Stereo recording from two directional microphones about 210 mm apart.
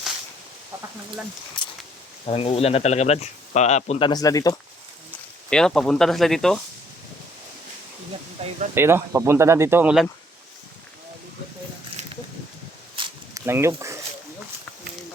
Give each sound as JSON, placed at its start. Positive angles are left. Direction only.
{"t": 1.6, "sound": "speech", "side_deg": 20}
{"t": 5.5, "sound": "speech", "side_deg": 5}
{"t": 8.4, "sound": "speech", "side_deg": -30}
{"t": 8.7, "sound": "speech", "side_deg": -10}
{"t": 12.0, "sound": "a sound", "side_deg": -30}
{"t": 13.0, "sound": "a sound", "side_deg": -15}